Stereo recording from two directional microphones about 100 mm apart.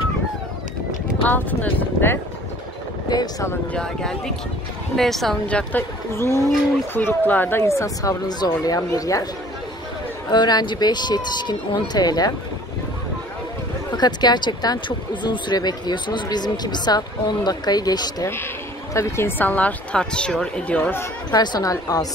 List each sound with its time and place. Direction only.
1.2 s speech: 20° left (ahead or behind)
3.1 s speech: 40° left (ahead or behind)
3.7 s speech: 5° left (ahead or behind); by 9.3 s 35° left (ahead or behind)
10.3 s speech: 45° left (ahead or behind)
13.9 s speech: 45° left (ahead or behind)
18.2 s speech: 25° left (ahead or behind)
21.3 s speech: 45° left (ahead or behind)